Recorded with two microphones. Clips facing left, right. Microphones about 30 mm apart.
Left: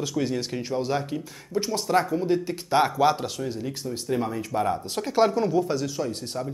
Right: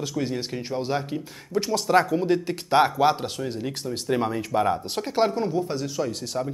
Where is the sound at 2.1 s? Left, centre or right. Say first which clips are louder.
Right 1 dB; right.